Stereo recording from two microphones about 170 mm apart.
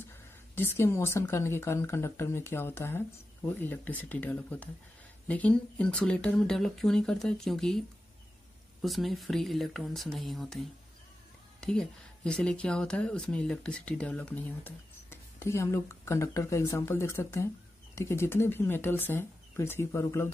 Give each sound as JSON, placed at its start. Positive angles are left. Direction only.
{"t": 0.6, "sound": "speech", "side_deg": 15}
{"t": 8.8, "sound": "speech", "side_deg": 0}